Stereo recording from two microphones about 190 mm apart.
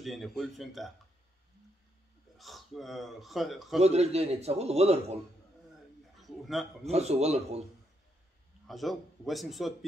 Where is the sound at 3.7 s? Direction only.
35° right (ahead or behind).